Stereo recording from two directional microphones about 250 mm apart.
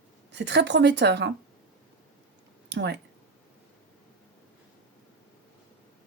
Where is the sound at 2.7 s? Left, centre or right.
Right.